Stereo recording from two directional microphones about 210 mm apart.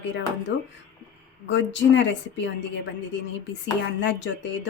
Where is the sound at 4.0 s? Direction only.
60° left (ahead or behind).